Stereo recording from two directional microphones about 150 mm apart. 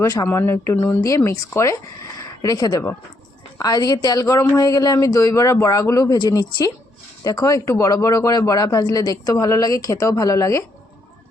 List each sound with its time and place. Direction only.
0.0 s speech: 25° left (ahead or behind)